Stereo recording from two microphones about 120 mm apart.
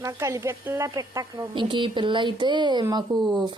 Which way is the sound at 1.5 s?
45° right (ahead or behind).